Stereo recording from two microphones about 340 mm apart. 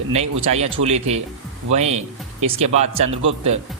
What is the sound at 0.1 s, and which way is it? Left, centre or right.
Speech, centre.